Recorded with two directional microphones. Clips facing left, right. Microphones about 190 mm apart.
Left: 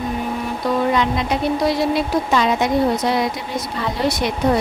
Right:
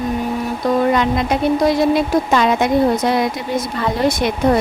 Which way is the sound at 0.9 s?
50° right (ahead or behind).